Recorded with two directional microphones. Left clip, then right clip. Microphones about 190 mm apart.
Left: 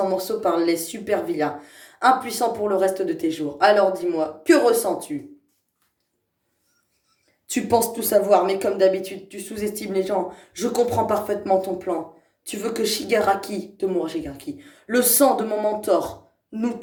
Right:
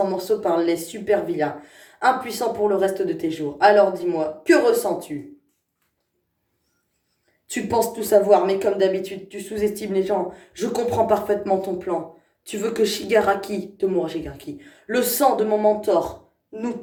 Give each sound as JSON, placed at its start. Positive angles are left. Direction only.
{"t": 0.0, "sound": "speech", "side_deg": 30}
{"t": 7.5, "sound": "speech", "side_deg": 30}